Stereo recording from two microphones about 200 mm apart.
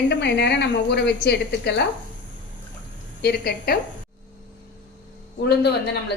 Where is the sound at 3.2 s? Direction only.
55° left (ahead or behind).